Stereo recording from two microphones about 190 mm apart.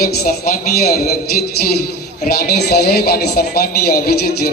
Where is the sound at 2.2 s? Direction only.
55° left (ahead or behind).